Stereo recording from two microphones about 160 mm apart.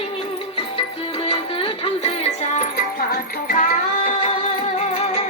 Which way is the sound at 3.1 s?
65° left (ahead or behind).